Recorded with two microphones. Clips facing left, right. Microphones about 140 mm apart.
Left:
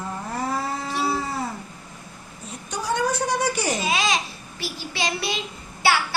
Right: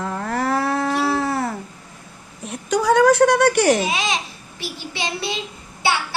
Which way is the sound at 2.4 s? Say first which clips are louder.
Right 11 dB; 85° right.